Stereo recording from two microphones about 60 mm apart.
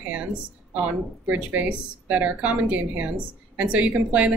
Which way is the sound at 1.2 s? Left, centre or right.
Right.